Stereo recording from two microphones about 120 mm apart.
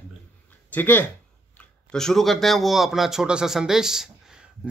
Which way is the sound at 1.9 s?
5° left (ahead or behind).